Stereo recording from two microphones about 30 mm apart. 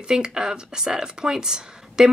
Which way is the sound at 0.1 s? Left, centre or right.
Right.